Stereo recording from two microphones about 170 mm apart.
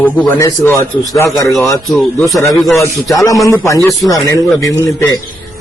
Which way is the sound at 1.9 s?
Centre (ahead or behind).